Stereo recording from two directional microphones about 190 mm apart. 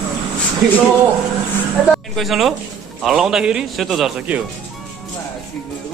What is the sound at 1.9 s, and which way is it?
A man's voice, centre (ahead or behind).